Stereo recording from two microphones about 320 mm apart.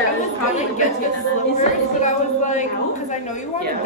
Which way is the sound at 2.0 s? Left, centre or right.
Left.